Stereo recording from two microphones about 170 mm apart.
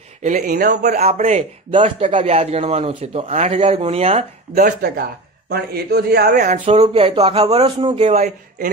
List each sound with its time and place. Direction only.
0.4 s a man's voice: 65° right (ahead or behind)
0.8 s a man's voice: 45° right (ahead or behind)
4.6 s a man's voice: 60° right (ahead or behind)
6.6 s a man's voice: 35° right (ahead or behind)